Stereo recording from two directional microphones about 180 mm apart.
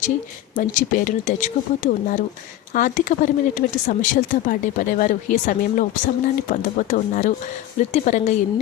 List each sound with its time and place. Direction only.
0.5 s speech: 45° left (ahead or behind)